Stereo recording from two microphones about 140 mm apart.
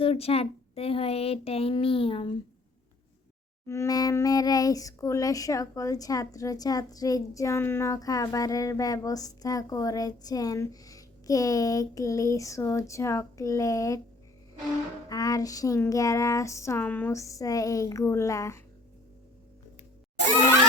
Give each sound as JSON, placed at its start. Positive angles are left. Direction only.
{"t": 0.0, "sound": "speech", "side_deg": 45}
{"t": 3.7, "sound": "speech", "side_deg": 25}
{"t": 15.1, "sound": "speech", "side_deg": 25}